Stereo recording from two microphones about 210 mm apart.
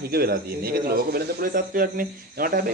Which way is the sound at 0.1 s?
45° right (ahead or behind).